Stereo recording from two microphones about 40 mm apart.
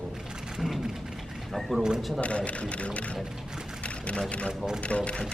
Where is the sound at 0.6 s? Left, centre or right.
Centre.